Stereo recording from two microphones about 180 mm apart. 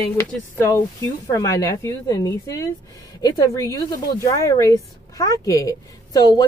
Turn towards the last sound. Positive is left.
turn(degrees=20)  # may be behind; listen again after turning